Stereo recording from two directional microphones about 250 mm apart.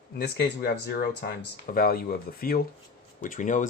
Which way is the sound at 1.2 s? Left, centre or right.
Left.